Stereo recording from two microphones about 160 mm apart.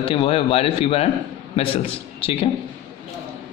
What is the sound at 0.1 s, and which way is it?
A man's voice, 35° left (ahead or behind).